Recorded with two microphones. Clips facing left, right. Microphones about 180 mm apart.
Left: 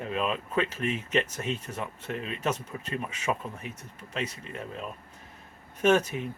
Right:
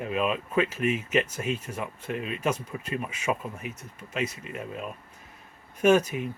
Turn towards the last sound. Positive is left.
turn(degrees=-10)  # may be behind; listen again after turning